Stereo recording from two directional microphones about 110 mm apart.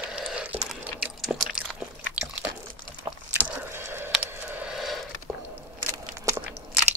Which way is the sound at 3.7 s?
20° right (ahead or behind).